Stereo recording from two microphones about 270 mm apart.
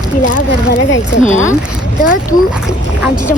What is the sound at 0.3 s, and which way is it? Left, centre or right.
Speech, left.